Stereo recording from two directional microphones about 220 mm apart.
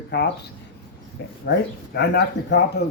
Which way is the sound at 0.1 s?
50° left (ahead or behind).